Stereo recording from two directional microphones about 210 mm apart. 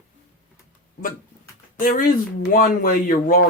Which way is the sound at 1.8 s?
40° left (ahead or behind).